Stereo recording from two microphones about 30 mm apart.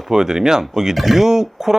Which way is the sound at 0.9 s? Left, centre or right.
Centre.